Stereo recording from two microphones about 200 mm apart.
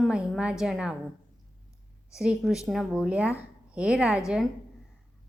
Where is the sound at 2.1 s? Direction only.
5° right (ahead or behind).